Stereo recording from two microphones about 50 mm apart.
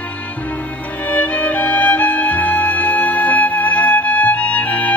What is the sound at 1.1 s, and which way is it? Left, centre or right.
Music, left.